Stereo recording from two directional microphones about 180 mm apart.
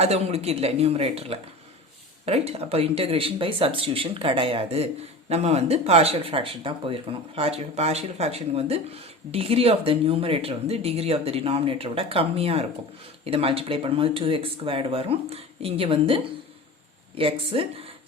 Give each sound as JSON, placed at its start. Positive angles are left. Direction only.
{"t": 0.0, "sound": "speech", "side_deg": -35}